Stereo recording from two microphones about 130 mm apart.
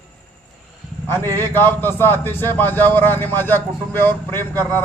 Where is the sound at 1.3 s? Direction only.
15° left (ahead or behind).